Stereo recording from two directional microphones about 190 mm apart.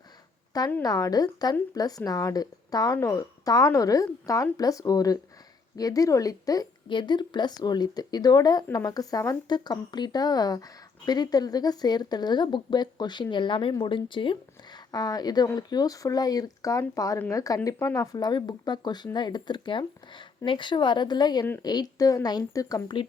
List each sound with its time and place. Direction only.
0.8 s a woman's voice: 20° left (ahead or behind)